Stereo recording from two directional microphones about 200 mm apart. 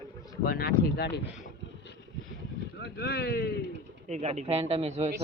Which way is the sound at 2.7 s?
55° left (ahead or behind).